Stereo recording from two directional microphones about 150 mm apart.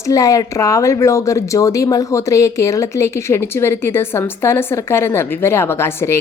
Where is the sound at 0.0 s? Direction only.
20° left (ahead or behind).